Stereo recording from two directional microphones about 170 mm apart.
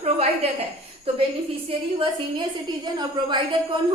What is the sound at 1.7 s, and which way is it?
A woman's voice, 30° right (ahead or behind).